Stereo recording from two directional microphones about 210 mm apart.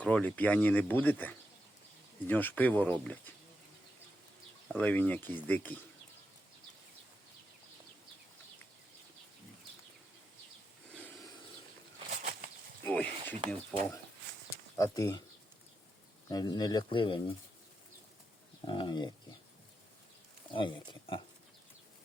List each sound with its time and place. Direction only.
0.0 s speech: 5° left (ahead or behind)
4.8 s speech: 5° left (ahead or behind)
10.9 s a sound: 10° left (ahead or behind)
12.1 s bird flight: 45° right (ahead or behind)
12.8 s a sound: 10° left (ahead or behind)
14.8 s speech: 15° left (ahead or behind)
16.3 s speech: 20° left (ahead or behind)
18.6 s speech: 25° left (ahead or behind)
20.5 s speech: 25° left (ahead or behind)